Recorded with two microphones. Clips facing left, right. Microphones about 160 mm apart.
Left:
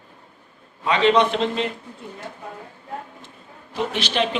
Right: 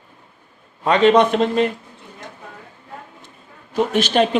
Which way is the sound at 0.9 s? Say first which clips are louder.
Right 4 dB; 45° right (ahead or behind).